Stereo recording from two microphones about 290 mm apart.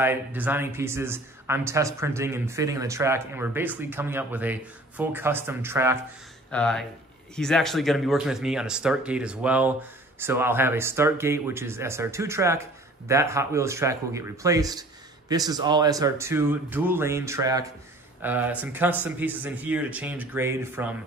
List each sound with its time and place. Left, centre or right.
0.0 s speech: centre
6.5 s speech: centre